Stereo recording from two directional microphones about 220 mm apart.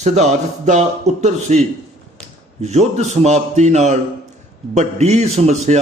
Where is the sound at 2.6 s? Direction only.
30° right (ahead or behind).